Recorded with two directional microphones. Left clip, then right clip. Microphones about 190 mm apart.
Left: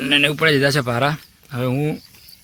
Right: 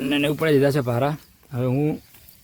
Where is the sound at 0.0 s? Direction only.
10° right (ahead or behind).